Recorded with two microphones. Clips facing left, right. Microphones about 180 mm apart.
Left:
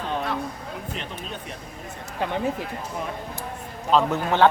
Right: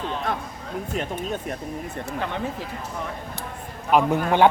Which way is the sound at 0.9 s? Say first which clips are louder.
Right 7 dB; 50° right (ahead or behind).